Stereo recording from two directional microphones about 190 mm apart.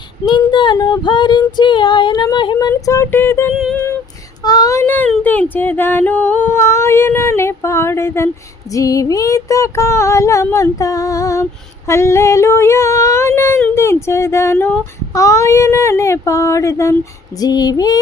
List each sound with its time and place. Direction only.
0.3 s child singing: 25° left (ahead or behind)
4.4 s speech: 20° left (ahead or behind)
11.9 s female singing: 15° left (ahead or behind)
13.7 s speech: 15° left (ahead or behind)